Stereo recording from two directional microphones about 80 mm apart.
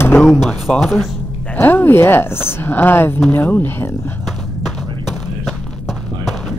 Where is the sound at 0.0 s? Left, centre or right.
Left.